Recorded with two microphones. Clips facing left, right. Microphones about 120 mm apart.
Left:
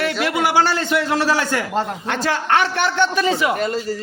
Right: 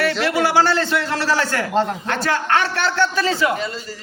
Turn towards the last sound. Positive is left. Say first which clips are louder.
# left 6 dB
turn(degrees=50)  # may be behind; listen again after turning